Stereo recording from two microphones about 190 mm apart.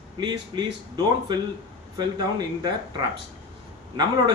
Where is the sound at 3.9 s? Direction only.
20° right (ahead or behind).